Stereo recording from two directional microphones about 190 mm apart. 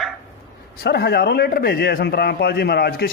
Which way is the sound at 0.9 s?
60° left (ahead or behind).